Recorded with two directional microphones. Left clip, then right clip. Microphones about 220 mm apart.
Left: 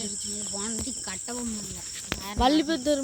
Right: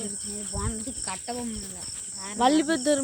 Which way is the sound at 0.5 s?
45° left (ahead or behind).